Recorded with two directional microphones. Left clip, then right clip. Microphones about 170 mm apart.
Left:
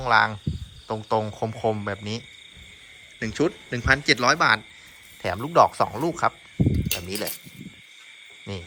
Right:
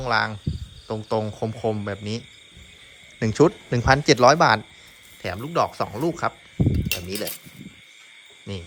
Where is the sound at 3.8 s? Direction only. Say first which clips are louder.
Right 4 dB; 30° right (ahead or behind).